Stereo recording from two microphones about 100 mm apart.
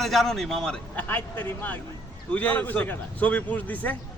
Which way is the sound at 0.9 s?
20° left (ahead or behind).